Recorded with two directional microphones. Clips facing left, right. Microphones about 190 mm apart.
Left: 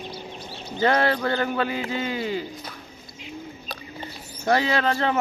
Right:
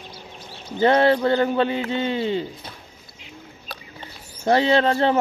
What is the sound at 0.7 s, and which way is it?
Speech, 25° right (ahead or behind).